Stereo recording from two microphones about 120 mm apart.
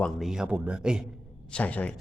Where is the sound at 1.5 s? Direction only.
10° left (ahead or behind).